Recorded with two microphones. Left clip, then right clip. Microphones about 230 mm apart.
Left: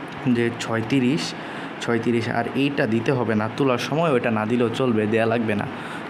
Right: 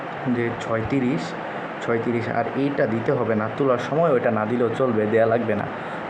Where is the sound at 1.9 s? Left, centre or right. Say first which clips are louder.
Left 1 dB; left.